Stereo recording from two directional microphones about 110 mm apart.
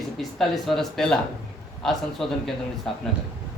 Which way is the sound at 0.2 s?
Centre (ahead or behind).